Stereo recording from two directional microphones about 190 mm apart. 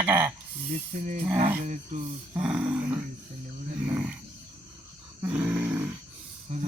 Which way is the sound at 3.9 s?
10° right (ahead or behind).